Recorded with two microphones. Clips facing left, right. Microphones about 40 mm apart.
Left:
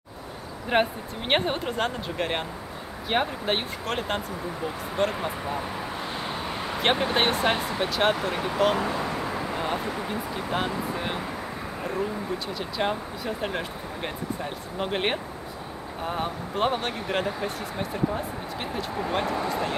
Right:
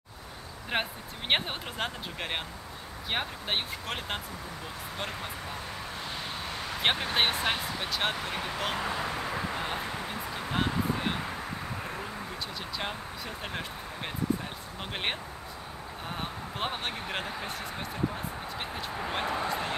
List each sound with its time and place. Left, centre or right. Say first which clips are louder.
0.7 s speech: left 8 dB; centre
4.9 s speech: left 11 dB; centre
6.2 s vehicle: left 5 dB; centre
6.8 s speech: left 4 dB; centre
12.5 s speech: left 9 dB; centre
19.2 s speech: left 3 dB; centre